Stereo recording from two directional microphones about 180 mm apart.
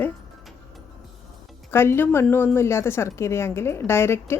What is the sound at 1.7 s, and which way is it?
Speech, 15° left (ahead or behind).